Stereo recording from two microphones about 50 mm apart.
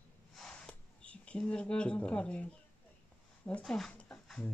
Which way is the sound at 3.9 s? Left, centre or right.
Left.